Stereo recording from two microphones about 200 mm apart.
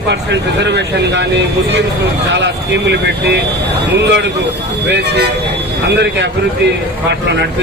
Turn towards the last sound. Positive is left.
turn(degrees=-60)  # may be behind; listen again after turning